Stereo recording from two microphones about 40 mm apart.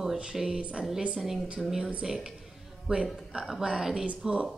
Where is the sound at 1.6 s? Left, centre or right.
Centre.